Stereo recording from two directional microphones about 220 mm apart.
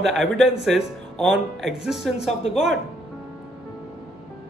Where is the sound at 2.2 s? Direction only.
55° right (ahead or behind).